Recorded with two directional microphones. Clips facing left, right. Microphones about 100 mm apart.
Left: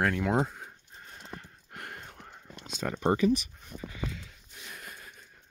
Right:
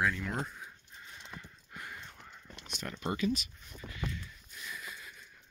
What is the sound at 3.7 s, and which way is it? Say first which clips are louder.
Speech: left 7 dB; 40° left (ahead or behind).